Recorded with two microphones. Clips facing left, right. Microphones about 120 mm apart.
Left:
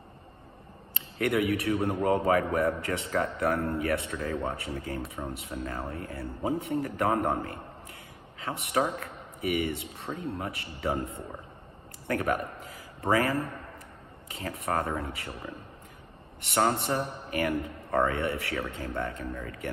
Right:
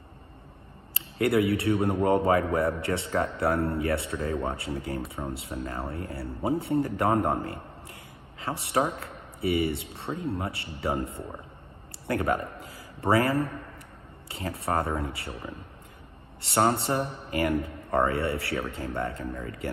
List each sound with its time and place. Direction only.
0.9 s a sound: 30° right (ahead or behind)
1.5 s a man's voice: 30° right (ahead or behind)
12.1 s a man's voice: 25° right (ahead or behind)